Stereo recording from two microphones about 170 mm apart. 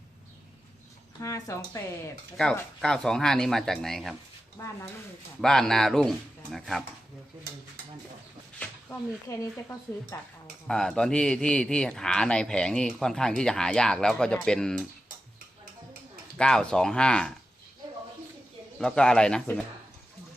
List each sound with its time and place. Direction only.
1.2 s speech: 15° left (ahead or behind)
2.8 s speech: 5° left (ahead or behind)
4.6 s speech: 15° left (ahead or behind)
5.4 s speech: 5° left (ahead or behind)
9.4 s speech: 15° left (ahead or behind)
10.4 s speech: 5° left (ahead or behind)
16.4 s speech: 5° left (ahead or behind)
18.8 s speech: 5° left (ahead or behind)